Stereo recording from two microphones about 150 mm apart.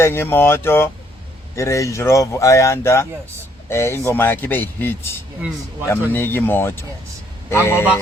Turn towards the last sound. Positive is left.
turn(degrees=15)  # may be behind; listen again after turning